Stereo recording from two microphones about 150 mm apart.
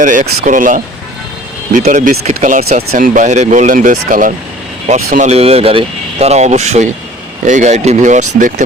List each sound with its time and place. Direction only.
0.0 s speech: 60° right (ahead or behind)
2.9 s speech: 65° right (ahead or behind)
4.9 s speech: 50° right (ahead or behind)